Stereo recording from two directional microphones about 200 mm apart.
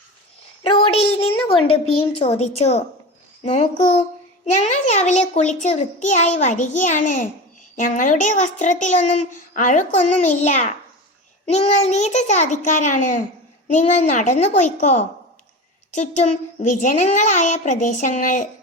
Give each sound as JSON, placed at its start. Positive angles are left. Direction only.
{"t": 0.6, "sound": "a woman's voice", "side_deg": 30}